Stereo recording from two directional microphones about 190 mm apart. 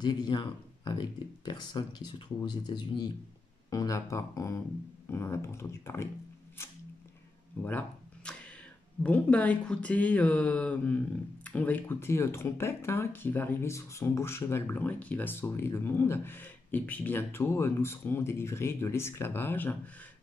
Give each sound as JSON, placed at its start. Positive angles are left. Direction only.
{"t": 0.0, "sound": "speech", "side_deg": 20}
{"t": 6.6, "sound": "a sound", "side_deg": 15}
{"t": 7.6, "sound": "speech", "side_deg": 5}